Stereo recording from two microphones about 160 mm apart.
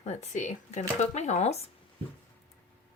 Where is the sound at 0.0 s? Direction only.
45° left (ahead or behind).